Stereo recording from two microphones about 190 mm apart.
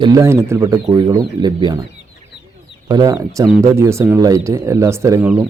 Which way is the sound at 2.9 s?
20° right (ahead or behind).